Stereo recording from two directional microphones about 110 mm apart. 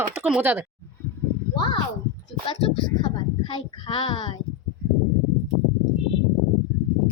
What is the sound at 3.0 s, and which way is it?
Speech, 45° left (ahead or behind).